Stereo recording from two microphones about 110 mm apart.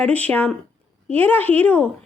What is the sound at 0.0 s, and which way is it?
Speech, 15° left (ahead or behind).